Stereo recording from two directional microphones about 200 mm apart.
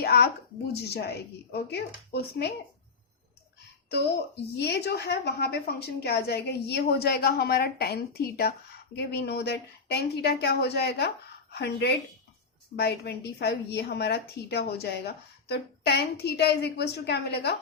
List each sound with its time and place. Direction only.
0.0 s a sound: 50° left (ahead or behind)
0.7 s a woman's voice: 55° left (ahead or behind)
3.8 s a woman's voice: 55° left (ahead or behind)